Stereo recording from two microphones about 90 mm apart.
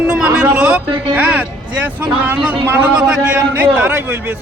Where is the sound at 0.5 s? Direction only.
10° right (ahead or behind).